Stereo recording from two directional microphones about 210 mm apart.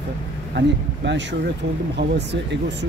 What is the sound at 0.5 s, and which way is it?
Speech, 55° right (ahead or behind).